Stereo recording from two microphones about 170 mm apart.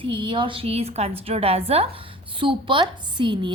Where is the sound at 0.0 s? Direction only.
30° right (ahead or behind).